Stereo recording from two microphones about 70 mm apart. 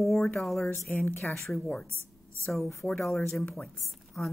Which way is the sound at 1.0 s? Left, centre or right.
Left.